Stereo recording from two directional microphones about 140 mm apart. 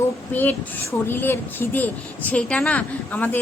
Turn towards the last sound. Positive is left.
turn(degrees=10)  # may be behind; listen again after turning